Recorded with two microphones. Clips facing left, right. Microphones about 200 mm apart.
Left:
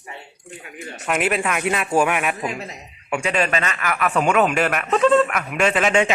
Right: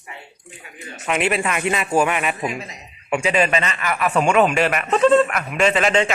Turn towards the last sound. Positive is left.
turn(degrees=5)  # may be behind; listen again after turning